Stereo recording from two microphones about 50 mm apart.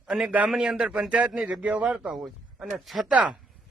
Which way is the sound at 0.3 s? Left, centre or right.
Right.